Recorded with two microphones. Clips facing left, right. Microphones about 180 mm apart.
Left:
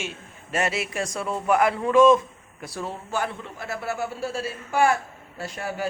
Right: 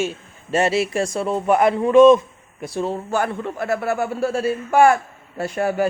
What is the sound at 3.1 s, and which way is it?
A man's voice, 50° right (ahead or behind).